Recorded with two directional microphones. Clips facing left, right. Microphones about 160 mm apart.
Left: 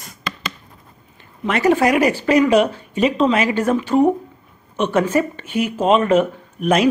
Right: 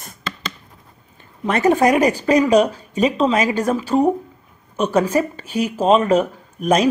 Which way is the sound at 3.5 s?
10° right (ahead or behind).